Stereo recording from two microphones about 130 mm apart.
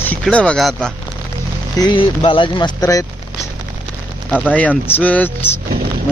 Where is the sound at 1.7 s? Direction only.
35° left (ahead or behind).